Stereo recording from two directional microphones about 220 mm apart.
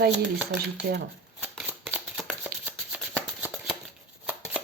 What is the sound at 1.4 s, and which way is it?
Shuffling cards, 5° right (ahead or behind).